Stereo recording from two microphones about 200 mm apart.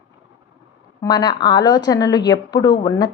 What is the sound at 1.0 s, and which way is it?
Speech, 20° left (ahead or behind).